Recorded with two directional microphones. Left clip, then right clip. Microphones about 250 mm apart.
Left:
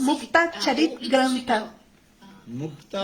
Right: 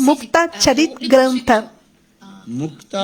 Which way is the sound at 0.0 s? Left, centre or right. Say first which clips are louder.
Right 6 dB; right.